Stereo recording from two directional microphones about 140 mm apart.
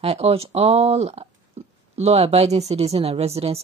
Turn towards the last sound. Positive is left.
turn(degrees=-45)  # may be behind; listen again after turning